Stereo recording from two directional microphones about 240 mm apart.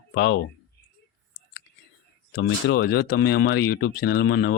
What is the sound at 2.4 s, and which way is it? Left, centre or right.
Speech, left.